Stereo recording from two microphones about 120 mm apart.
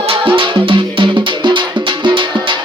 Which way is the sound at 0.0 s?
45° right (ahead or behind).